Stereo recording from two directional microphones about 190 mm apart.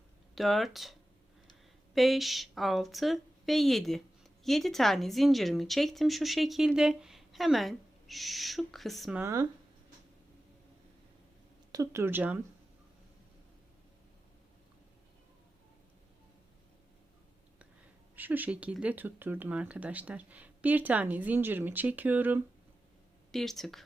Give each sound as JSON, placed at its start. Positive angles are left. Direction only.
{"t": 0.3, "sound": "a woman's voice", "side_deg": 0}
{"t": 2.0, "sound": "a woman's voice", "side_deg": 0}
{"t": 9.2, "sound": "speech", "side_deg": -15}
{"t": 11.7, "sound": "speech", "side_deg": -15}
{"t": 18.2, "sound": "speech", "side_deg": -10}
{"t": 23.3, "sound": "a woman's voice", "side_deg": 0}